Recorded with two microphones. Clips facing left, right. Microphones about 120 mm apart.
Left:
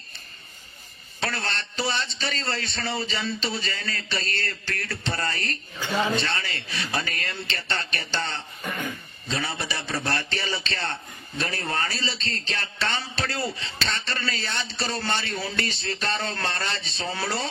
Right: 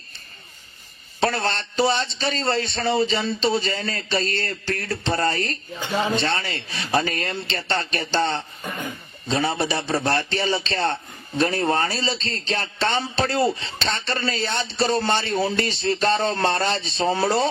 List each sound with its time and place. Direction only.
1.2 s speech: 30° right (ahead or behind)